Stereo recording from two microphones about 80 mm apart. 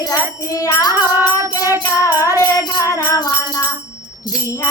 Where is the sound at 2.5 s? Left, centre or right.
Left.